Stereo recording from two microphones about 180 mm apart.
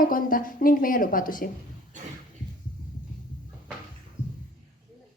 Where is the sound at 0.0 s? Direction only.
50° left (ahead or behind).